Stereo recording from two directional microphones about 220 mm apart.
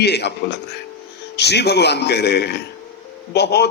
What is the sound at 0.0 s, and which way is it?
Speech, 50° left (ahead or behind).